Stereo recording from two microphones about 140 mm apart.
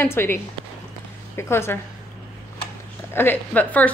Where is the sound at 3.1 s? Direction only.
15° left (ahead or behind).